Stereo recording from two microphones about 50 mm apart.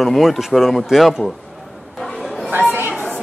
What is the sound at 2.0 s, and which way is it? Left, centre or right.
Chatter, centre.